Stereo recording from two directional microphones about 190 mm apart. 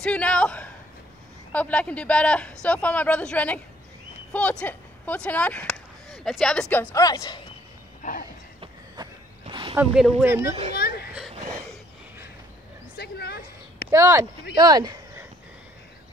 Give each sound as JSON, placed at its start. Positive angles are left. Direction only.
{"t": 0.0, "sound": "speech", "side_deg": 5}
{"t": 6.9, "sound": "speech", "side_deg": 20}
{"t": 8.0, "sound": "a sound", "side_deg": 45}
{"t": 8.5, "sound": "walk", "side_deg": -20}
{"t": 9.8, "sound": "speech", "side_deg": 0}
{"t": 10.2, "sound": "a child's voice", "side_deg": -15}
{"t": 10.5, "sound": "a child's voice", "side_deg": -35}
{"t": 10.8, "sound": "a sound", "side_deg": 55}
{"t": 12.9, "sound": "a sound", "side_deg": 60}
{"t": 13.8, "sound": "speech", "side_deg": -15}